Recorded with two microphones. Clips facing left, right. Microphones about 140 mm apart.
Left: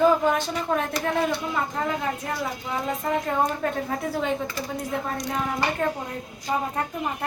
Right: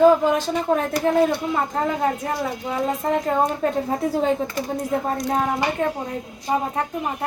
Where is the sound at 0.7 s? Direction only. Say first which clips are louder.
Right 6 dB; 35° right (ahead or behind).